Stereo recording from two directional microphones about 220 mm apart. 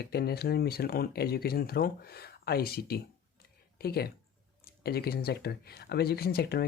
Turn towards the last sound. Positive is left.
turn(degrees=45)  # may be behind; listen again after turning